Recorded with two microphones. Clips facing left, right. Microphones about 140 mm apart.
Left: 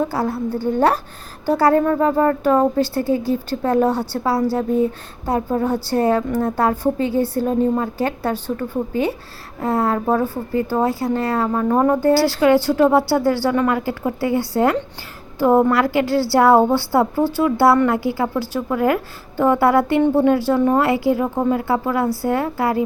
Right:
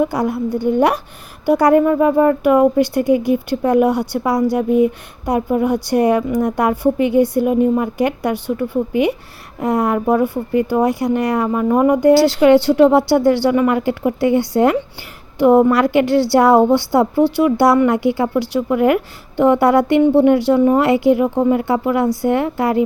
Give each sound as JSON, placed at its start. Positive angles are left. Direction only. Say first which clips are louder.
{"t": 0.0, "sound": "a woman's voice", "louder": "right 3 dB", "side_deg": -15}